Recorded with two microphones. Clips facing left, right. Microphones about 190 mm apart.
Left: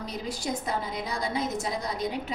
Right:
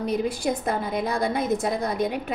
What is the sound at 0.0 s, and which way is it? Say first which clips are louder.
A woman's voice: right 9 dB; 55° right (ahead or behind).